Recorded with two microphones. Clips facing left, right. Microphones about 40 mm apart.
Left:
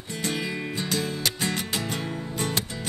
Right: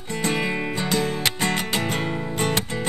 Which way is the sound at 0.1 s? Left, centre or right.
Right.